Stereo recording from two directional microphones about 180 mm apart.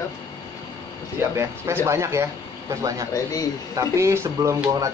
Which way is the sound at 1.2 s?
15° right (ahead or behind).